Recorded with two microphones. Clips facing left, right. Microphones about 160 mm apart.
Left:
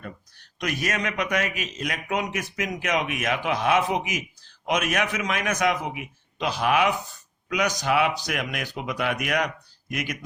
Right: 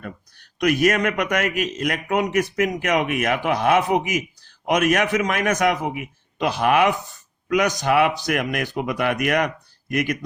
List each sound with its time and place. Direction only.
0.0 s a man's voice: 55° right (ahead or behind)